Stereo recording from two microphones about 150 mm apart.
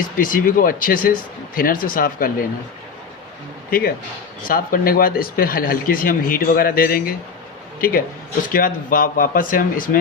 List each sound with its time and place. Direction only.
0.0 s speech: 65° left (ahead or behind)
3.7 s a man's voice: 80° left